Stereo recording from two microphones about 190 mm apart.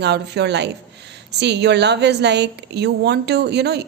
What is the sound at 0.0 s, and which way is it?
A woman's voice, 65° right (ahead or behind).